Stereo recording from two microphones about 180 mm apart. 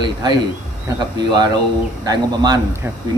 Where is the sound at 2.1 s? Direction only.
20° right (ahead or behind).